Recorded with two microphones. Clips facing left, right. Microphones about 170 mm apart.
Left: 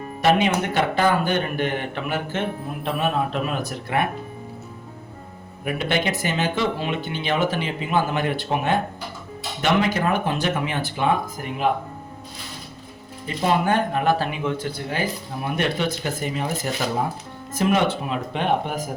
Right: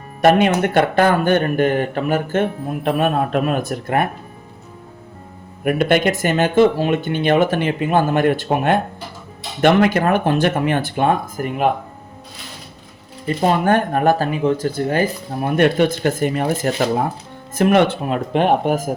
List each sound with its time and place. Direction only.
0.2 s speech: 55° right (ahead or behind)
2.8 s speech: 55° right (ahead or behind)
5.6 s speech: 55° right (ahead or behind)
13.2 s speech: 50° right (ahead or behind)